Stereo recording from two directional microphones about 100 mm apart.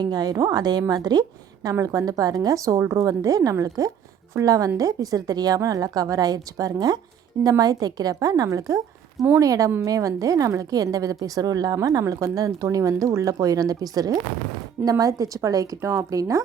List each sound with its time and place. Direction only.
0.0 s a woman's voice: 40° right (ahead or behind)